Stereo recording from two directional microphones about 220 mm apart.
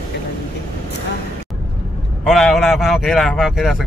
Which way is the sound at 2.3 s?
Centre (ahead or behind).